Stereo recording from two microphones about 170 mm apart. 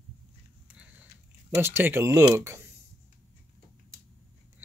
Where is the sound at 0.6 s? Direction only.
10° right (ahead or behind).